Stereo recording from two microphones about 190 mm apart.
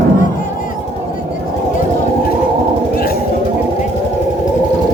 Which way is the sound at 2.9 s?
50° left (ahead or behind).